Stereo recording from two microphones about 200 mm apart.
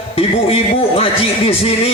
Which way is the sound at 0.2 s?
30° left (ahead or behind).